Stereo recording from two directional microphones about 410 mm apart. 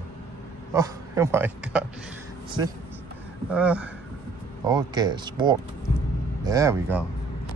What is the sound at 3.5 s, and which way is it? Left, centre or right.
Speech, centre.